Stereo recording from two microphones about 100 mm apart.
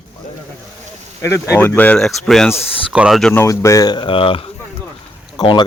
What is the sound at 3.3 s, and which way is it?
Speech, 30° left (ahead or behind).